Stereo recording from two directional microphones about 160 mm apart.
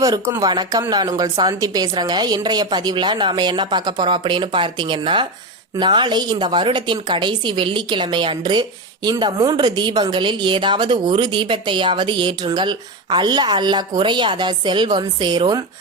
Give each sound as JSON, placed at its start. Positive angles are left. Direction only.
{"t": 0.0, "sound": "a woman's voice", "side_deg": -20}